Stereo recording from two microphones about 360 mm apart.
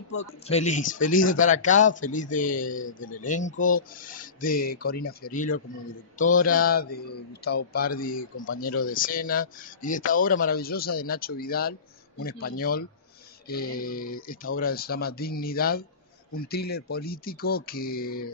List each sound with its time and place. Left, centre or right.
0.2 s speech: centre